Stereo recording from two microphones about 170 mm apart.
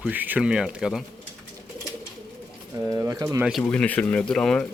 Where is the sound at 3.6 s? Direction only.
10° left (ahead or behind).